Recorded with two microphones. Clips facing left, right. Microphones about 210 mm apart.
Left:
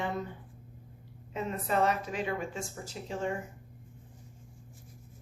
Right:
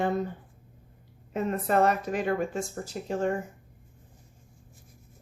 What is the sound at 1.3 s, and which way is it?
A woman's voice, 50° right (ahead or behind).